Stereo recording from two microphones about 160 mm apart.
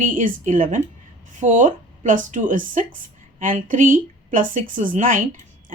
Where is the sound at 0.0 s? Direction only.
55° right (ahead or behind).